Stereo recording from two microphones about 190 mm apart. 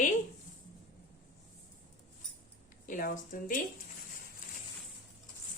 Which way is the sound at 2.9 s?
45° left (ahead or behind).